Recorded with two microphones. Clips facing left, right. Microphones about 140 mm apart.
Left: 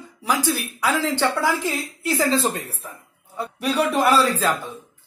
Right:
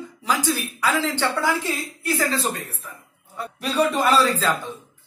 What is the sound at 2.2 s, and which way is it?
Speech, 25° left (ahead or behind).